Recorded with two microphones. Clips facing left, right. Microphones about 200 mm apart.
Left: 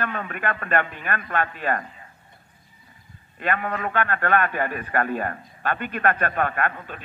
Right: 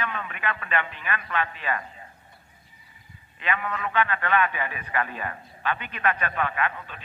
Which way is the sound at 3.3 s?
50° left (ahead or behind).